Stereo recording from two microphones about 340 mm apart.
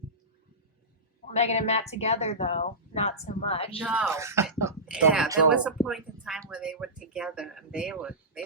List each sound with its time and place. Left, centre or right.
1.3 s speech: centre
3.8 s speech: centre